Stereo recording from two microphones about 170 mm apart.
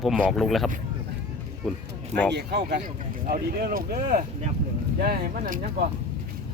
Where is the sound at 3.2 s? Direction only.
55° right (ahead or behind).